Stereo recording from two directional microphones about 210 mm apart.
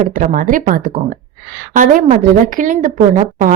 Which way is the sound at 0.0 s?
40° right (ahead or behind).